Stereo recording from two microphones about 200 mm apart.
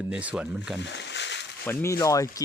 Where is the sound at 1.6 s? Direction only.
10° left (ahead or behind).